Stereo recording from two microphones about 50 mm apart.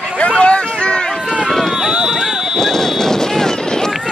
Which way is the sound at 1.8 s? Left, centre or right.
Centre.